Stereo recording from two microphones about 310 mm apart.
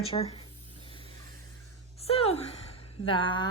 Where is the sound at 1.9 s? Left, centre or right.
Centre.